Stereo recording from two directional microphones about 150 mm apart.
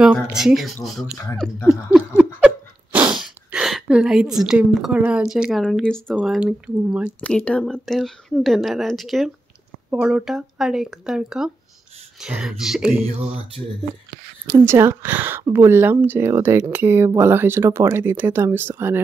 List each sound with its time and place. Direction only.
0.0 s speech: 5° right (ahead or behind)
1.9 s a sound: 5° right (ahead or behind)
6.1 s speech: 5° right (ahead or behind)
7.1 s speech: 10° left (ahead or behind)
14.7 s speech: 15° right (ahead or behind)